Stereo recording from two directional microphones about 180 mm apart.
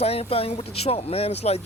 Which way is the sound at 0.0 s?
35° left (ahead or behind).